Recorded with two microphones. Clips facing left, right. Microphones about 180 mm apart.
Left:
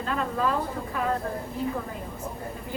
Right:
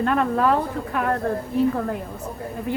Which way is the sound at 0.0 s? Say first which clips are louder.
Right 7 dB; 65° right (ahead or behind).